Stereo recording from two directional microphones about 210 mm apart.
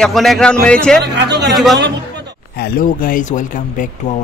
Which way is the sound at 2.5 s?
45° left (ahead or behind).